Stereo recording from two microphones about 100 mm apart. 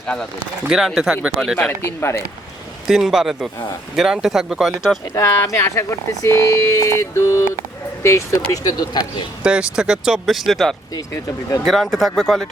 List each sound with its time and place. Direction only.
0.7 s speech: centre (ahead or behind)
2.0 s speech: 25° left (ahead or behind)
2.8 s speech: 5° right (ahead or behind)
5.1 s speech: 35° left (ahead or behind)
8.6 s speech: 45° left (ahead or behind)
9.4 s speech: 10° right (ahead or behind)